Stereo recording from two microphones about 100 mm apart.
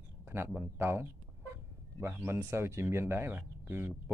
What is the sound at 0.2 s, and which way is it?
Speech, 25° right (ahead or behind).